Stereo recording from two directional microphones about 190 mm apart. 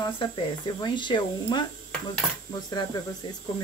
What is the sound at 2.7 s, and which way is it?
Speech, 20° left (ahead or behind).